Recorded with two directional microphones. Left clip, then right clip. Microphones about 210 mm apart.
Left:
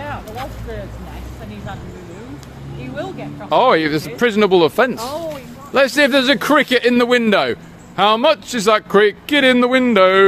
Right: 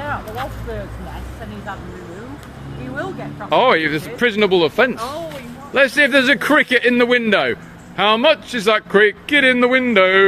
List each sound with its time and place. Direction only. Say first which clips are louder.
3.0 s a man's voice: right 1 dB; 20° left (ahead or behind)